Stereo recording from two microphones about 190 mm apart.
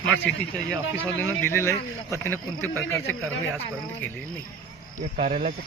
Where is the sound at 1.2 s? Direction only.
10° left (ahead or behind).